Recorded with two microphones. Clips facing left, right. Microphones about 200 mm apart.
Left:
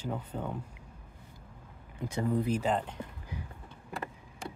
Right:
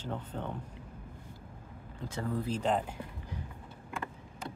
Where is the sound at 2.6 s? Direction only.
5° right (ahead or behind).